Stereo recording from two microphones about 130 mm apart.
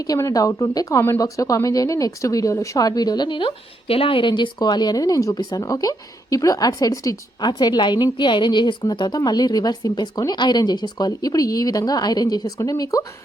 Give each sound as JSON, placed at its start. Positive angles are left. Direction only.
{"t": 0.0, "sound": "a woman's voice", "side_deg": 25}